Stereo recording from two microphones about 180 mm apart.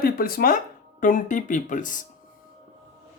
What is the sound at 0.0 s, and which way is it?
Speech, 55° left (ahead or behind).